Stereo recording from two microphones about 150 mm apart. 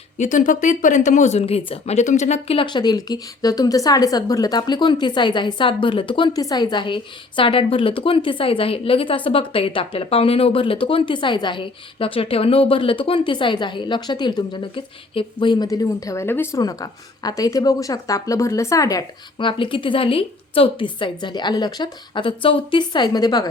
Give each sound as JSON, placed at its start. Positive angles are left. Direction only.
{"t": 0.2, "sound": "speech", "side_deg": 55}